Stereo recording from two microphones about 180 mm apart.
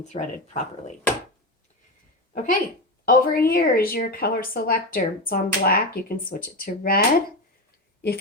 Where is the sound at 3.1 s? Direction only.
55° left (ahead or behind).